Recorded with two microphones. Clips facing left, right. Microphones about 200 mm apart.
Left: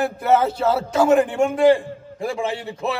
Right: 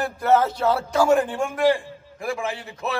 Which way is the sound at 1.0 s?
20° left (ahead or behind).